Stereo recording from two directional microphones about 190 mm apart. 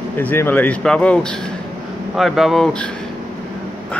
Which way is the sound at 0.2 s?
10° left (ahead or behind).